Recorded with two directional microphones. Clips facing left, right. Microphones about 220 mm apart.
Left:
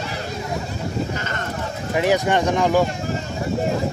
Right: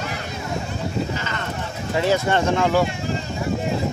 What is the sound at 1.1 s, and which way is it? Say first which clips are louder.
Sheep: left 1 dB; 50° left (ahead or behind).